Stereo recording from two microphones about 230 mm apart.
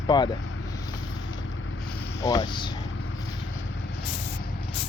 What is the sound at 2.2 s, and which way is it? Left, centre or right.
Speech, centre.